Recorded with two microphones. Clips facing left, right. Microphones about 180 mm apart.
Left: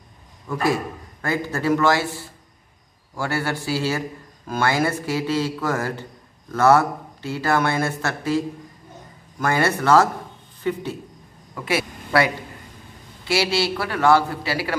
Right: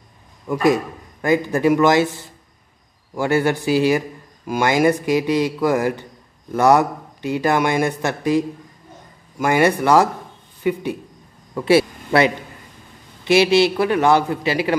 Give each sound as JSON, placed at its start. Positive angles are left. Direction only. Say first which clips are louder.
{"t": 0.5, "sound": "speech", "louder": "right 5 dB", "side_deg": -20}
{"t": 11.5, "sound": "a man's voice", "louder": "right 9 dB", "side_deg": -30}